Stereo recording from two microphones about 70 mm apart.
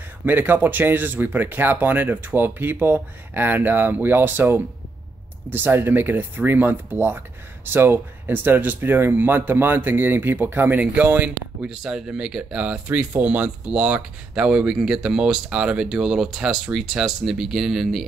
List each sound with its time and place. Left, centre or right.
0.2 s speech: right; by 18.0 s centre